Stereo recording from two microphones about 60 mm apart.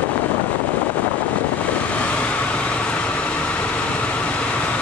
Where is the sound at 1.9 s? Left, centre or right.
Left.